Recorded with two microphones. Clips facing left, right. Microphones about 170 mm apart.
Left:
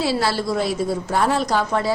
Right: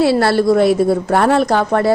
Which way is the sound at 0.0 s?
60° right (ahead or behind).